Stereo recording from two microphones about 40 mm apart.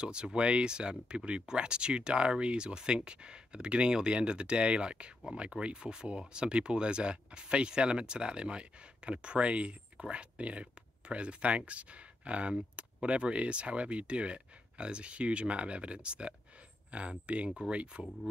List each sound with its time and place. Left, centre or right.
0.0 s speech: right